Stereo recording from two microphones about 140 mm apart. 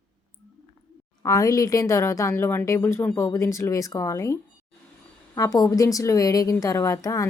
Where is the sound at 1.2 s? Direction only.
25° left (ahead or behind).